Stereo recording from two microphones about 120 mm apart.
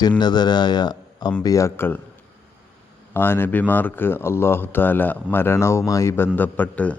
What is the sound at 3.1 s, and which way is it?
Speech, 20° left (ahead or behind).